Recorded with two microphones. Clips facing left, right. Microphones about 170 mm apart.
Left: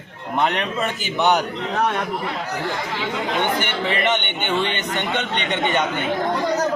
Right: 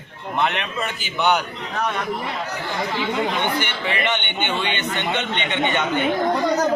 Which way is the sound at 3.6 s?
45° left (ahead or behind).